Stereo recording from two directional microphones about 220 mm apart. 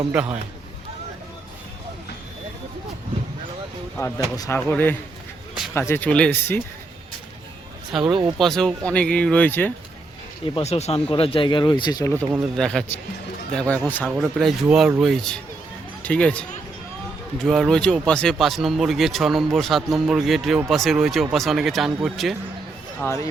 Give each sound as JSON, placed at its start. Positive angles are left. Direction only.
{"t": 0.1, "sound": "speech", "side_deg": -5}
{"t": 4.4, "sound": "speech", "side_deg": 10}
{"t": 7.9, "sound": "speech", "side_deg": 0}
{"t": 10.4, "sound": "speech", "side_deg": 25}
{"t": 12.5, "sound": "speech", "side_deg": 5}
{"t": 23.0, "sound": "speech", "side_deg": 10}